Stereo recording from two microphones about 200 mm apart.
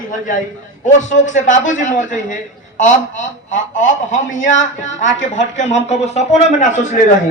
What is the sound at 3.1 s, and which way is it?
Speech, 70° left (ahead or behind).